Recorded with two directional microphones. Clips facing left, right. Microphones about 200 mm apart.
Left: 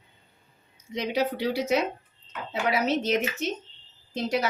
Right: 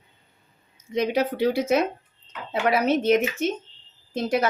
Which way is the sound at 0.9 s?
50° right (ahead or behind).